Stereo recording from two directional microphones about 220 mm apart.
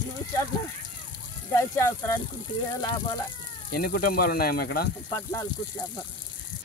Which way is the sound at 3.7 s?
45° left (ahead or behind).